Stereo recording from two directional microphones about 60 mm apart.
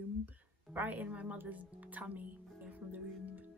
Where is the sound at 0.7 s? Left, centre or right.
Right.